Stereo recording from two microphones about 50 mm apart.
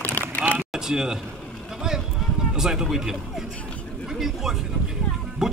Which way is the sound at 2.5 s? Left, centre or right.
Centre.